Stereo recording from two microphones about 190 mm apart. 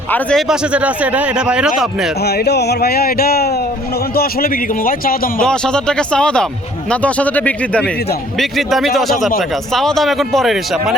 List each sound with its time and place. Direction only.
0.1 s a man's voice: 5° left (ahead or behind)
2.2 s speech: 60° left (ahead or behind)
5.5 s a man's voice: 5° left (ahead or behind)